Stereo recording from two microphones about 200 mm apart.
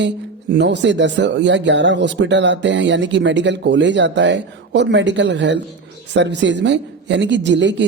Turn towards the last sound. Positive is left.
turn(degrees=-60)  # may be behind; listen again after turning